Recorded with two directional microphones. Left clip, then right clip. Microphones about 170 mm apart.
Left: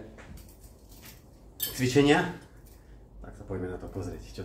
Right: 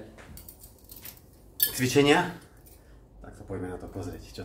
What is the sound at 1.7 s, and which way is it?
Speech, 25° right (ahead or behind).